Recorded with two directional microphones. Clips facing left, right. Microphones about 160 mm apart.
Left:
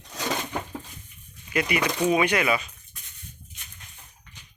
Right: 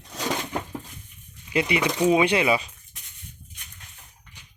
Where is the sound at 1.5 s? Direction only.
25° right (ahead or behind).